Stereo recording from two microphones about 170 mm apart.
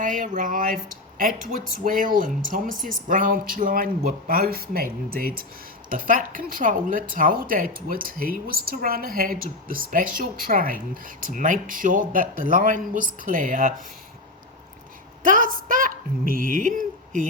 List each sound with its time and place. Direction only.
0.0 s speech: 50° right (ahead or behind)
15.2 s a woman's voice: 50° right (ahead or behind)